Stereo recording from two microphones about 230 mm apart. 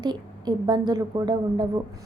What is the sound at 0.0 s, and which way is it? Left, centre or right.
A woman's voice, centre.